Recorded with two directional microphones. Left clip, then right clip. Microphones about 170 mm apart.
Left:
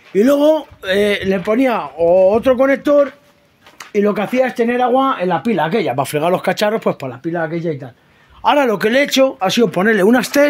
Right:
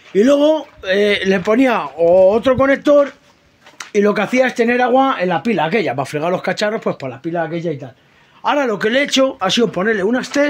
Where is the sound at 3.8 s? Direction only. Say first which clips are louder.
Right 1 dB; 5° right (ahead or behind).